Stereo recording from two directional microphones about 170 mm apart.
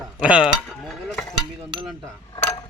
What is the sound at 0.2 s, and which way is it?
Dishes, 5° right (ahead or behind).